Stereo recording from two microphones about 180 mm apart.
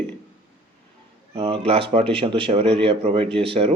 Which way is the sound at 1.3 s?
35° right (ahead or behind).